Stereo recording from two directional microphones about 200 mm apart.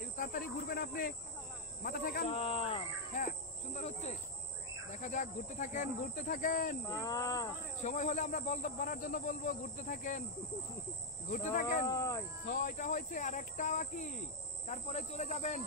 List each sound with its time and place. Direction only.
0.2 s speech: 45° left (ahead or behind)
2.2 s speech: 30° left (ahead or behind)
6.9 s speech: 15° left (ahead or behind)
7.8 s speech: 40° left (ahead or behind)
11.2 s speech: 45° left (ahead or behind)
11.8 s speech: 15° left (ahead or behind)
12.4 s speech: 40° left (ahead or behind)